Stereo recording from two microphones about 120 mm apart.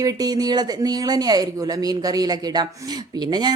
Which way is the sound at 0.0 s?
30° right (ahead or behind).